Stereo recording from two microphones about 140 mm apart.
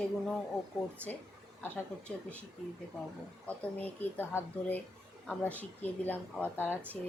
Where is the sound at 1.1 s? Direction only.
5° left (ahead or behind).